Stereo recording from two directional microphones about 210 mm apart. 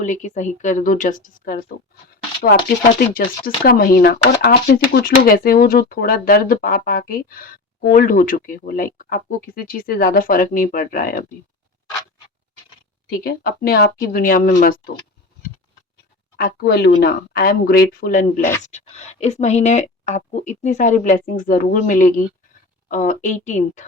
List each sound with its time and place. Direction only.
0.0 s speech: 35° left (ahead or behind)
3.2 s speech: 45° left (ahead or behind)
13.1 s speech: 45° left (ahead or behind)
16.4 s speech: 50° left (ahead or behind); by 23.8 s 35° left (ahead or behind)